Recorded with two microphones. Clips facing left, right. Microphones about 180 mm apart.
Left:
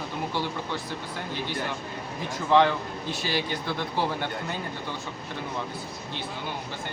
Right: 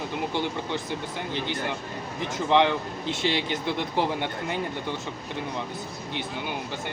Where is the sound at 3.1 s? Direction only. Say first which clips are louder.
Right 3 dB; 20° right (ahead or behind).